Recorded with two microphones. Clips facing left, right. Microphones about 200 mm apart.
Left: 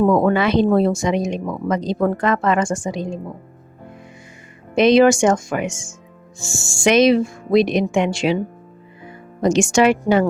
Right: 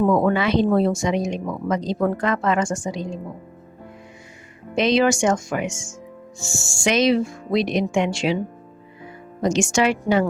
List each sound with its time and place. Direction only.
0.1 s speech: 55° left (ahead or behind)
4.7 s speech: 55° left (ahead or behind)
6.8 s speech: 55° left (ahead or behind)
9.4 s speech: 55° left (ahead or behind)